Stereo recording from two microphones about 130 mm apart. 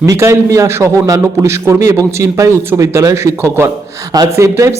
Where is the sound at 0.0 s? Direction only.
25° right (ahead or behind).